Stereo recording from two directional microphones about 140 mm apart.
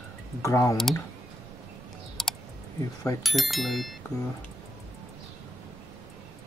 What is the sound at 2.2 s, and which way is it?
Computer keyboard, centre (ahead or behind).